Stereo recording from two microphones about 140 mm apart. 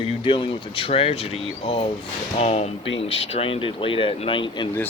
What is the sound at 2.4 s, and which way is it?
Speech, 50° left (ahead or behind).